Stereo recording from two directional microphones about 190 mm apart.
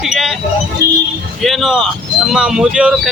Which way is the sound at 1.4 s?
Centre (ahead or behind).